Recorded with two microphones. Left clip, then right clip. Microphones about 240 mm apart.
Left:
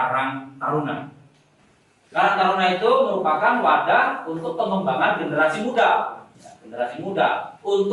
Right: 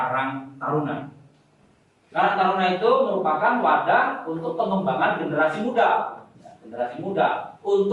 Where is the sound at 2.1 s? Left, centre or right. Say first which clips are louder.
Left 2 dB; centre.